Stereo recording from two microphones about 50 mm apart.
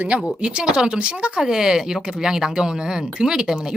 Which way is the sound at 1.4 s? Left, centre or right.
Centre.